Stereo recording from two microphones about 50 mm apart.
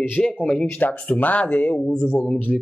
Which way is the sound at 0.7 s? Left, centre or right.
Left.